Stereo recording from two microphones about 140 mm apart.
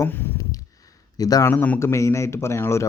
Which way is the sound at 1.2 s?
25° left (ahead or behind).